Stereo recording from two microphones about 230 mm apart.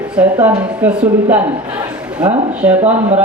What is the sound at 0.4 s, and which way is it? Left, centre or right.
Speech, centre.